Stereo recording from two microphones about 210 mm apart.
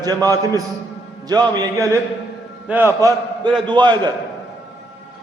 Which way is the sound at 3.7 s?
20° right (ahead or behind).